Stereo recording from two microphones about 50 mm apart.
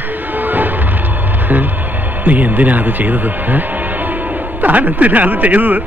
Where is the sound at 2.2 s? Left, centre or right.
Right.